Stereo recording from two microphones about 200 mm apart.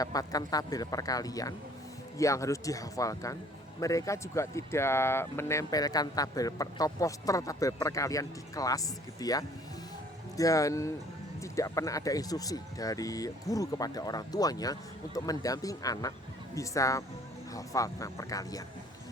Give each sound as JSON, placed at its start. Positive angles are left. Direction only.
{"t": 0.0, "sound": "speech", "side_deg": 20}